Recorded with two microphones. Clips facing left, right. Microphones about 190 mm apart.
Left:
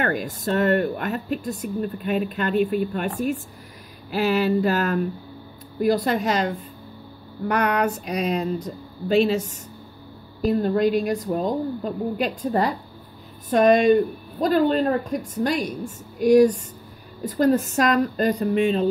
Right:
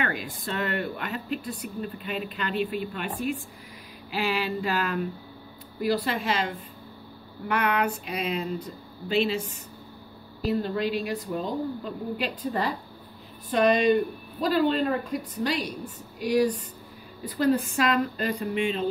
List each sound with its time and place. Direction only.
0.0 s speech: 45° left (ahead or behind)
4.1 s speech: 45° left (ahead or behind)
7.4 s a sound: 40° left (ahead or behind)
8.6 s speech: 40° left (ahead or behind)